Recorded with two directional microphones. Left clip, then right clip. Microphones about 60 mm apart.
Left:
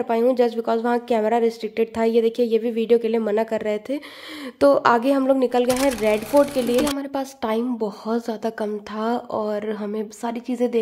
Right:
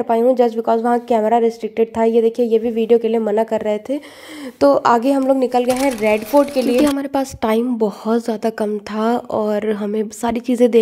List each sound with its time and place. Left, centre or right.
0.3 s a woman's voice: right
4.6 s speech: right
4.9 s speech: right
5.7 s speech: centre
7.0 s a woman's voice: right
7.8 s speech: right
10.2 s a woman's voice: right